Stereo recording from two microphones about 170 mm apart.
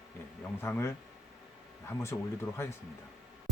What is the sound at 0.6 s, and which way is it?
Speech, 15° left (ahead or behind).